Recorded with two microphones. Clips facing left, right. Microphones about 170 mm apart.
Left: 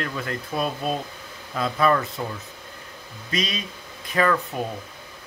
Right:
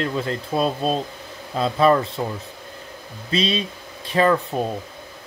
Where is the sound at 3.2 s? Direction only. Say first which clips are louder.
Right 6 dB; 30° right (ahead or behind).